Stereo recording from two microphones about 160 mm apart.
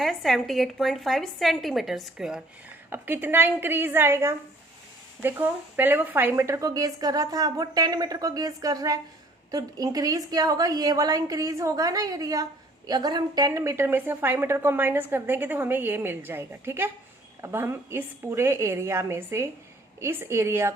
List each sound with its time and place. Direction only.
0.0 s a woman's voice: centre (ahead or behind); by 20.7 s 15° right (ahead or behind)